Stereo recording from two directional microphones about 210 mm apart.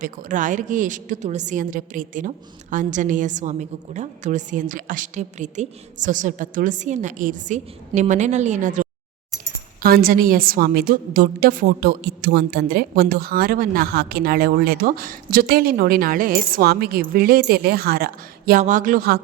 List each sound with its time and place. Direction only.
0.0 s a woman's voice: 40° right (ahead or behind)